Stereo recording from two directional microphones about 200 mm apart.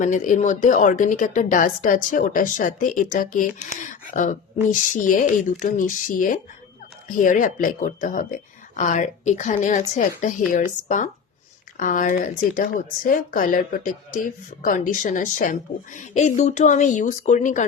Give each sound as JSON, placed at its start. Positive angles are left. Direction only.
{"t": 0.0, "sound": "a woman's voice", "side_deg": 40}